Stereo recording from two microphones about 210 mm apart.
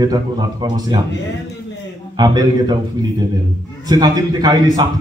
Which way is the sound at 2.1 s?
20° right (ahead or behind).